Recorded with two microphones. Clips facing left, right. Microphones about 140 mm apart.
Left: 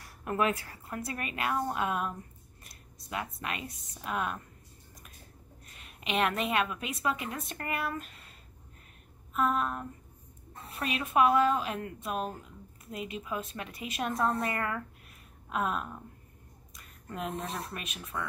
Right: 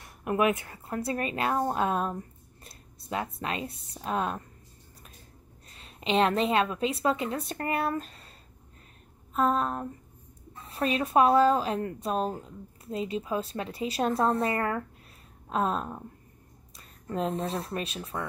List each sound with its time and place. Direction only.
0.0 s a woman's voice: 20° right (ahead or behind)
5.7 s speech: 30° right (ahead or behind)
9.3 s speech: 30° right (ahead or behind)